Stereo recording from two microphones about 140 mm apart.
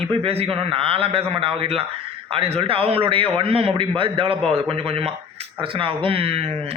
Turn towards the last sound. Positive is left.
turn(degrees=-40)  # may be behind; listen again after turning